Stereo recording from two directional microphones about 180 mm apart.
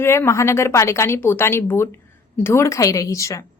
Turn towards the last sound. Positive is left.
turn(degrees=15)  # may be behind; listen again after turning